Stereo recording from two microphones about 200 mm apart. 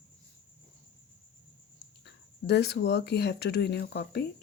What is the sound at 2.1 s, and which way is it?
A woman's voice, 55° left (ahead or behind).